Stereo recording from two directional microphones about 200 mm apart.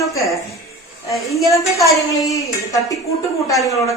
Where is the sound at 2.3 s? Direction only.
15° left (ahead or behind).